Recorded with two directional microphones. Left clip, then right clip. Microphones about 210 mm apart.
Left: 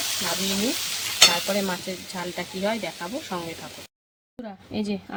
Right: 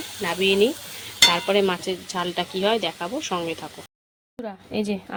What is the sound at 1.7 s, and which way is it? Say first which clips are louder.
Speech: right 5 dB; 20° right (ahead or behind).